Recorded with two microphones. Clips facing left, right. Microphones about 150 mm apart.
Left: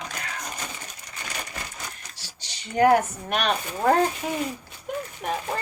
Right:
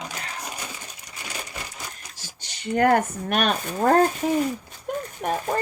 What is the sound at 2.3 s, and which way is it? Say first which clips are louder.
Speech: right 7 dB; 50° right (ahead or behind).